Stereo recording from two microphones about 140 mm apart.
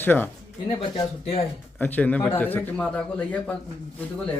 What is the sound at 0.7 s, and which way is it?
Speech, 35° left (ahead or behind).